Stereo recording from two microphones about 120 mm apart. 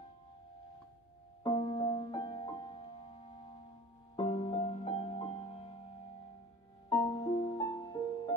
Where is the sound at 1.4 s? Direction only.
40° left (ahead or behind).